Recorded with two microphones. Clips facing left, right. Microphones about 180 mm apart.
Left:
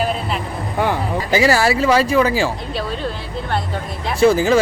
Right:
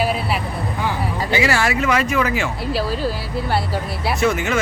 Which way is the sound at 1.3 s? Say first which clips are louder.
Left 4 dB; 35° left (ahead or behind).